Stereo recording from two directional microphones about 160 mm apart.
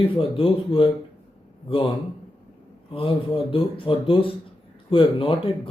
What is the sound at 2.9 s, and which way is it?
Speech, 35° left (ahead or behind).